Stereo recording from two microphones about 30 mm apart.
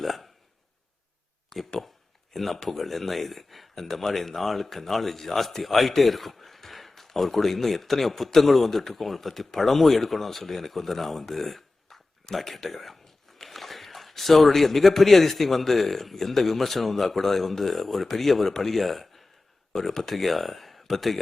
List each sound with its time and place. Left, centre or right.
0.0 s speech: centre
1.5 s speech: centre
2.3 s a man's voice: centre
18.8 s speech: centre